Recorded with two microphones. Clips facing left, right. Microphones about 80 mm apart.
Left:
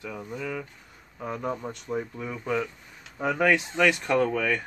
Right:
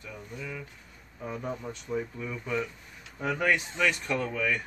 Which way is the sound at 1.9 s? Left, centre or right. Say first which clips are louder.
Left 1 dB; left.